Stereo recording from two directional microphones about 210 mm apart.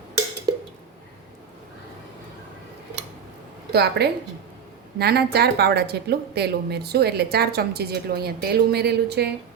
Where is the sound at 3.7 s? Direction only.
50° right (ahead or behind).